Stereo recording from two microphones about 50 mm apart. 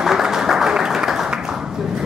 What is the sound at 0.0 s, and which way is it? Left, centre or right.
Applause, centre.